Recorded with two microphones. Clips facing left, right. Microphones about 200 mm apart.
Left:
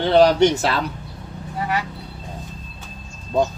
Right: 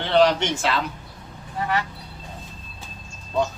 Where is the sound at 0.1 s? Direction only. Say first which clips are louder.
Left 4 dB; 40° left (ahead or behind).